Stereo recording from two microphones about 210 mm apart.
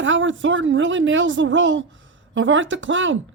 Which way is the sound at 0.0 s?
65° right (ahead or behind).